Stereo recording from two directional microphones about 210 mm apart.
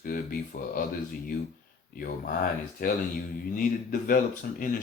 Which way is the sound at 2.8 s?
40° left (ahead or behind).